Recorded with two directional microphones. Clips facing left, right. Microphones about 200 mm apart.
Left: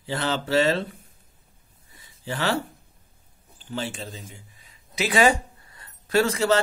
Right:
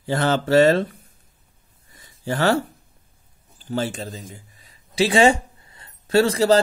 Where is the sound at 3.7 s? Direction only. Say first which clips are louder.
Right 6 dB; 40° right (ahead or behind).